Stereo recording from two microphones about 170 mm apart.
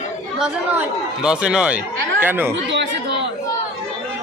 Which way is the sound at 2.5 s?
90° right.